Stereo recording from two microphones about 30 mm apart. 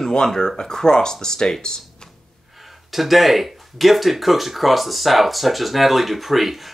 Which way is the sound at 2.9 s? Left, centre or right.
Centre.